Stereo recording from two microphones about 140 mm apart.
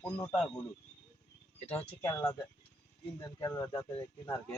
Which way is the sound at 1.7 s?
15° left (ahead or behind).